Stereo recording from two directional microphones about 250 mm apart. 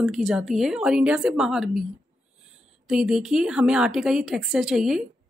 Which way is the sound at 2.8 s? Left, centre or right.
Centre.